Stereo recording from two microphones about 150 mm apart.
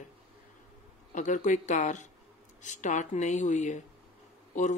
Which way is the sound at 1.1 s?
55° left (ahead or behind).